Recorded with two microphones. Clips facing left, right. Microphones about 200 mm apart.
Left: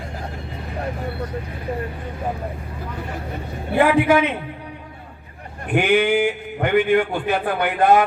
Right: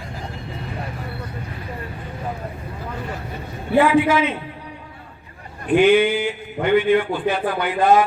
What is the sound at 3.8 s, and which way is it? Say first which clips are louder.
Speech: left 2 dB; 60° left (ahead or behind).